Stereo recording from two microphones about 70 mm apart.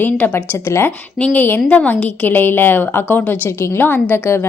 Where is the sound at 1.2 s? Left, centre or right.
Left.